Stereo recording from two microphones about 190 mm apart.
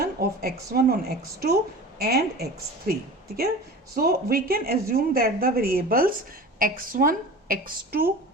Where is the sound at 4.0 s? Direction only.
55° right (ahead or behind).